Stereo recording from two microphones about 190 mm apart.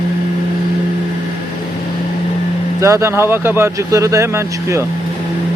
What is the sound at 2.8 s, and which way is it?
Speech, 15° right (ahead or behind).